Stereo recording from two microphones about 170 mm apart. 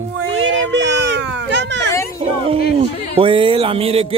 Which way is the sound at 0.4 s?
90° right.